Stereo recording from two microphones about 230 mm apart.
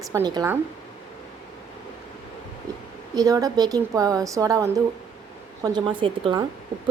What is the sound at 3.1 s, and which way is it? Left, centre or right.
A woman's voice, centre.